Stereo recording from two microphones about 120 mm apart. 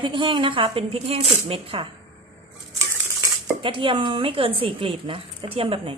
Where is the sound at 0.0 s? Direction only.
40° right (ahead or behind).